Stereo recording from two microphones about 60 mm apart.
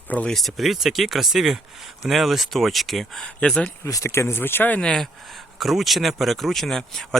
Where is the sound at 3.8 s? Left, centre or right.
Left.